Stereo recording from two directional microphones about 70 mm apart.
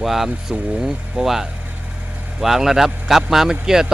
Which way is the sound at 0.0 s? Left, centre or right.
Centre.